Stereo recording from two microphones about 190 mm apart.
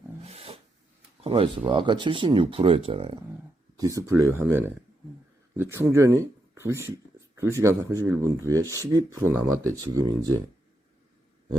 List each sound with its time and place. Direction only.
0.2 s a sound: 30° right (ahead or behind)
1.2 s speech: 30° right (ahead or behind)
3.8 s speech: 15° right (ahead or behind)